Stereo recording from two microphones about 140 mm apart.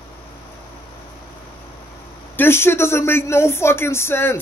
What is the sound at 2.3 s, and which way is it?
Speech, 15° left (ahead or behind).